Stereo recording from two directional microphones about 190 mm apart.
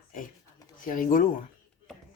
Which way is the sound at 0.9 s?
45° left (ahead or behind).